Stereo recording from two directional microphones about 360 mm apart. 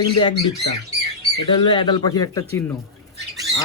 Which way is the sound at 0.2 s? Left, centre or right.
Centre.